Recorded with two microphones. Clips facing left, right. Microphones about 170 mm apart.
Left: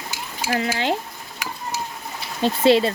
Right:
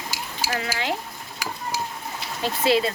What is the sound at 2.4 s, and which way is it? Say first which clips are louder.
Speech: left 6 dB; 25° left (ahead or behind).